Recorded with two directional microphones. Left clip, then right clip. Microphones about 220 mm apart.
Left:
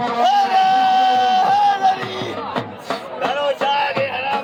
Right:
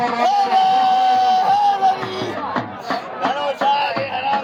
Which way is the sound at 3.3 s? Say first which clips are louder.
Even; centre (ahead or behind).